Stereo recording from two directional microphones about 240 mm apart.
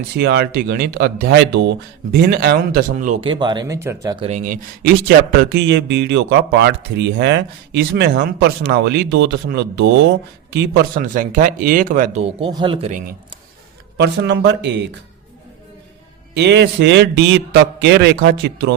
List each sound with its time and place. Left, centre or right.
0.2 s speech: right
5.0 s speech: right
13.9 s speech: right
16.3 s speech: right